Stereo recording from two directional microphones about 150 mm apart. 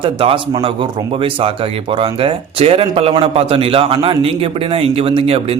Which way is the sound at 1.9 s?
35° right (ahead or behind).